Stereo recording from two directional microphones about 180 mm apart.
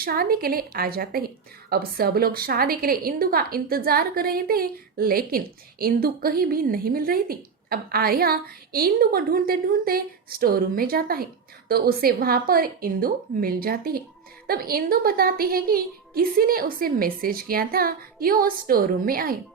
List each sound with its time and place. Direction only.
0.0 s a woman's voice: 55° right (ahead or behind)